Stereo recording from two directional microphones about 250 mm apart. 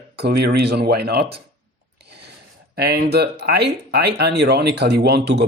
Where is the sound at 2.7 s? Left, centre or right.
Right.